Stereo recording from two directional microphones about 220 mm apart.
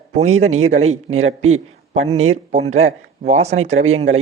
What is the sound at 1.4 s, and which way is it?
Speech, 70° right (ahead or behind).